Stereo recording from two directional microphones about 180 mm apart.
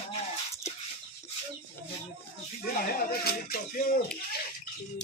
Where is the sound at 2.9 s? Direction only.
55° left (ahead or behind).